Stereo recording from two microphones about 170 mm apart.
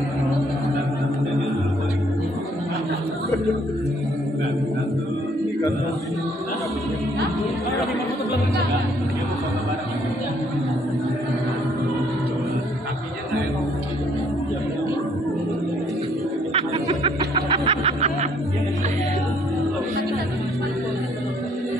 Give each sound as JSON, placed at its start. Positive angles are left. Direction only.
{"t": 16.5, "sound": "snicker", "side_deg": -30}